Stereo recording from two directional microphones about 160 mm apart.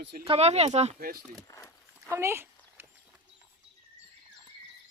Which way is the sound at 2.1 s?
15° right (ahead or behind).